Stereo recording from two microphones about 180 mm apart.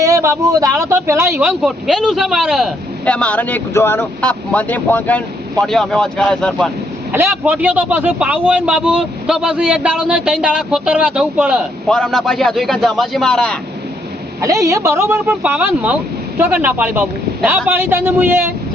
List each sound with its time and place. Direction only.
0.0 s speech: 15° right (ahead or behind)
1.5 s speech: centre (ahead or behind)
7.4 s speech: 10° right (ahead or behind)
11.9 s speech: 5° left (ahead or behind)
14.4 s speech: 15° right (ahead or behind)